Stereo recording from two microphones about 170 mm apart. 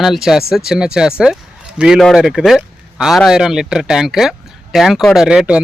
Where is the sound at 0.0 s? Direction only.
Centre (ahead or behind).